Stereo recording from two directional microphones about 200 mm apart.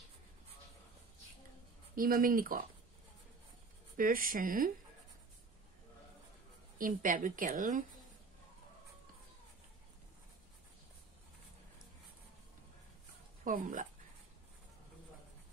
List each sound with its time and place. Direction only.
2.0 s a woman's voice: 45° right (ahead or behind)
3.9 s a woman's voice: 45° right (ahead or behind)
6.8 s a woman's voice: 45° right (ahead or behind)
13.4 s speech: 40° right (ahead or behind)